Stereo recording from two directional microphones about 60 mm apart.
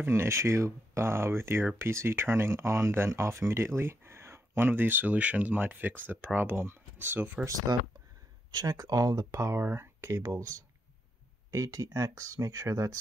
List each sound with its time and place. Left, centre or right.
0.1 s speech: right
4.6 s speech: right
7.7 s speech: right
8.6 s speech: right